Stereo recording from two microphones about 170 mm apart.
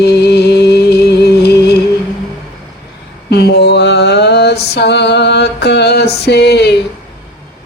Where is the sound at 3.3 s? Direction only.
85° left.